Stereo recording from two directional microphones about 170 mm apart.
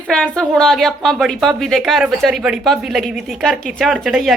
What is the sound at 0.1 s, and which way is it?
A woman's voice, 5° left (ahead or behind).